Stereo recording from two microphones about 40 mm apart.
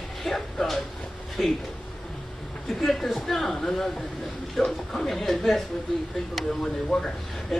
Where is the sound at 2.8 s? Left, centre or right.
Centre.